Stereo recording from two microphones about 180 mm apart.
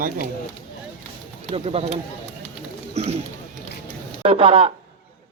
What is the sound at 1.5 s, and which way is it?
A man's voice, 30° right (ahead or behind).